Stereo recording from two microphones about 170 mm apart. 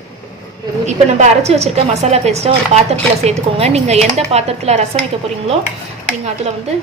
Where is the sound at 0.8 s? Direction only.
40° right (ahead or behind).